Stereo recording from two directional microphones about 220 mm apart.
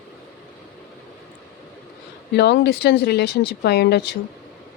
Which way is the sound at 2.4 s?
50° left (ahead or behind).